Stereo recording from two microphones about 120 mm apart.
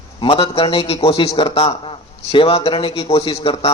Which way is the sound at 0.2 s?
45° left (ahead or behind).